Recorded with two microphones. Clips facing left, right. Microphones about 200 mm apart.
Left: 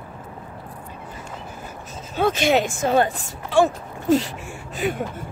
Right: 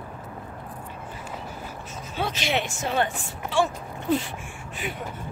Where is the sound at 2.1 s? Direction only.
50° left (ahead or behind).